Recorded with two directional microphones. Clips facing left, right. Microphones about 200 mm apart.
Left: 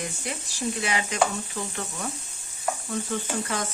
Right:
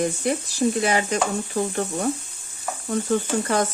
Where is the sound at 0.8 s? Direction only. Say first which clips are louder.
Right 4 dB; 45° right (ahead or behind).